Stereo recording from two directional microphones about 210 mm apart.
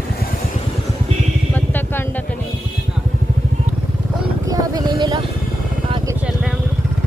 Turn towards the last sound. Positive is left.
turn(degrees=-25)  # may be behind; listen again after turning